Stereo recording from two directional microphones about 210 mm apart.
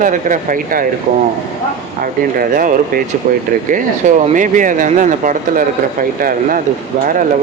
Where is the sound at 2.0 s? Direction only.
40° right (ahead or behind).